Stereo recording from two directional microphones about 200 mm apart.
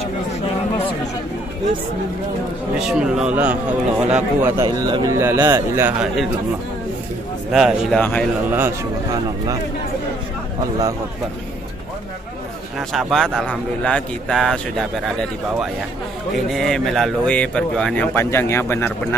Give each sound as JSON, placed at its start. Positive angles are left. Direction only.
{"t": 2.7, "sound": "speech", "side_deg": -5}
{"t": 4.6, "sound": "speech", "side_deg": -20}
{"t": 7.5, "sound": "speech", "side_deg": 0}
{"t": 8.5, "sound": "speech", "side_deg": -10}
{"t": 12.7, "sound": "speech", "side_deg": 0}
{"t": 16.4, "sound": "speech", "side_deg": 0}